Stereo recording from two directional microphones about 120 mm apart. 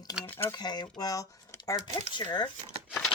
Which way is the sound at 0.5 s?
35° left (ahead or behind).